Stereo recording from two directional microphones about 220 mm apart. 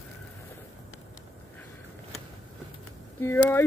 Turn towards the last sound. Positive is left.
turn(degrees=10)  # may be behind; listen again after turning